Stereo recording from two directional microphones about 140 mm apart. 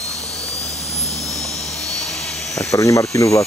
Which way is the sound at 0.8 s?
50° left (ahead or behind).